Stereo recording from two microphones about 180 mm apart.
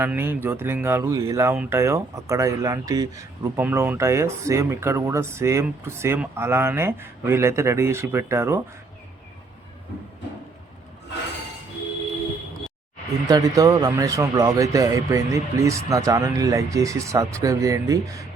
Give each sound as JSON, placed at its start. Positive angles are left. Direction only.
{"t": 0.0, "sound": "speech", "side_deg": -10}
{"t": 13.2, "sound": "speech", "side_deg": -20}